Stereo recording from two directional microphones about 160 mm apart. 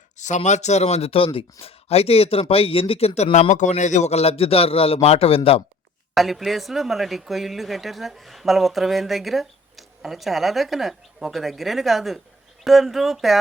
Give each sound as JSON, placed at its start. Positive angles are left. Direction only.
{"t": 0.2, "sound": "a man's voice", "side_deg": 50}
{"t": 3.3, "sound": "a man's voice", "side_deg": 50}
{"t": 6.1, "sound": "speech", "side_deg": 0}